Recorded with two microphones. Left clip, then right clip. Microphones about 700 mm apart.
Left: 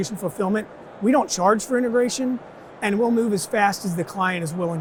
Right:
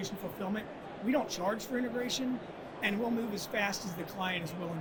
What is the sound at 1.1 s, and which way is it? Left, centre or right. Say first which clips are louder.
Speech: left 14 dB; left.